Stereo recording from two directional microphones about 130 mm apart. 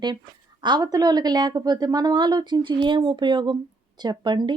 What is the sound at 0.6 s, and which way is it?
Speech, 35° right (ahead or behind).